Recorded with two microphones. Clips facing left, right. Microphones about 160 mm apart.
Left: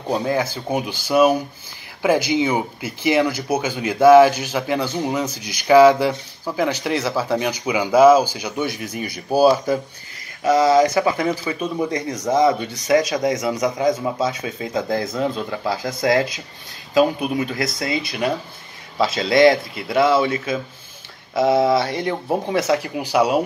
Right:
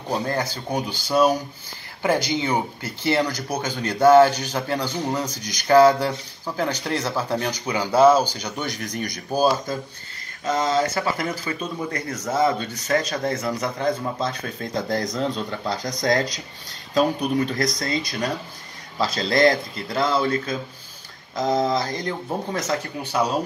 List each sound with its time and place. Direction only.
0.1 s speech: 10° left (ahead or behind)
21.4 s speech: 5° left (ahead or behind)
21.7 s speech: 30° left (ahead or behind)
22.6 s speech: 10° left (ahead or behind)